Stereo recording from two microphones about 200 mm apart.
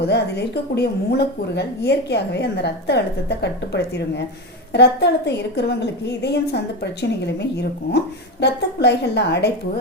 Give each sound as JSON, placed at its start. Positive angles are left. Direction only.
{"t": 0.0, "sound": "speech", "side_deg": 55}